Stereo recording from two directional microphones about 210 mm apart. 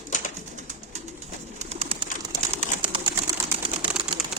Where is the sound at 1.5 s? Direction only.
30° right (ahead or behind).